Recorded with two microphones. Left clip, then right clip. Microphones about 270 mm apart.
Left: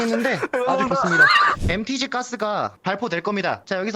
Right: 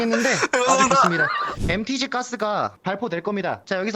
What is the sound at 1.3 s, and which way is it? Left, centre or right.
Speech, left.